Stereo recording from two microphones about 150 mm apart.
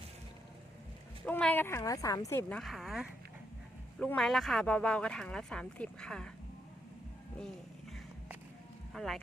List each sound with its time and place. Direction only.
1.2 s a woman's voice: 10° left (ahead or behind)
2.5 s speech: centre (ahead or behind)
8.9 s speech: centre (ahead or behind)